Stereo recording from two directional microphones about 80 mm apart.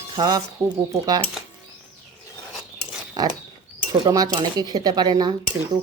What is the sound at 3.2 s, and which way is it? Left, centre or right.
Speech, right.